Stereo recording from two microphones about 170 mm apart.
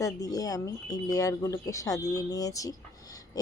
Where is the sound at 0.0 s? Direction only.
20° left (ahead or behind).